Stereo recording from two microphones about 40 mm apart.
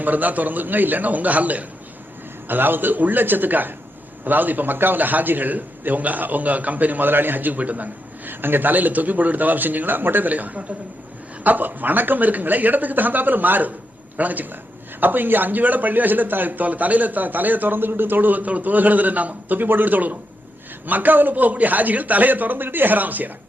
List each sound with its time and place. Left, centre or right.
0.0 s speech: right
2.5 s speech: right
8.3 s speech: right